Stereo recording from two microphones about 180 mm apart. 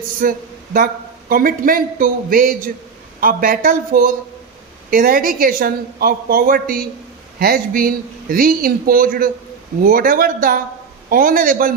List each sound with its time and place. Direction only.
0.2 s speech: 50° right (ahead or behind)